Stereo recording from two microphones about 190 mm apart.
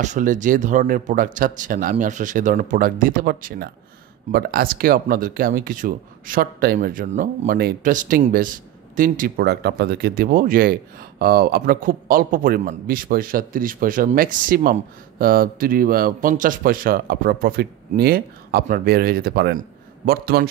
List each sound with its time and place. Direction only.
0.0 s a man's voice: 40° right (ahead or behind)